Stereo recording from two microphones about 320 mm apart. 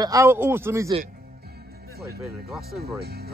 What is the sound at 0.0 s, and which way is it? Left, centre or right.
A man's voice, centre.